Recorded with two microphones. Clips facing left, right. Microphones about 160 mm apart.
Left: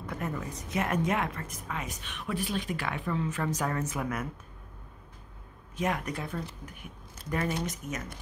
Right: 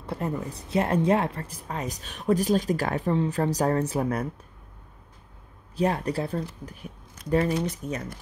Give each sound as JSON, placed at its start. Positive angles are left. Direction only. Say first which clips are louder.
{"t": 0.0, "sound": "a woman's voice", "louder": "right 5 dB", "side_deg": -30}
{"t": 5.8, "sound": "a woman's voice", "louder": "right 6 dB", "side_deg": -35}